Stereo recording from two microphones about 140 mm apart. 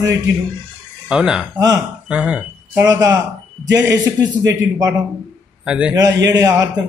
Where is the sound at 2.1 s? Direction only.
10° right (ahead or behind).